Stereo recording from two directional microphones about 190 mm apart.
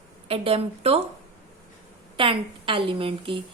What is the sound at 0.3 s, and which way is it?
Speech, 30° right (ahead or behind).